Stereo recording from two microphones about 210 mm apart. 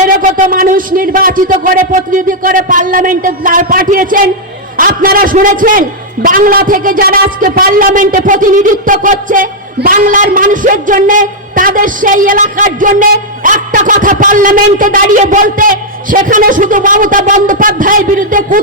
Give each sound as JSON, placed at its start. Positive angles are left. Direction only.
{"t": 0.2, "sound": "a man's voice", "side_deg": -40}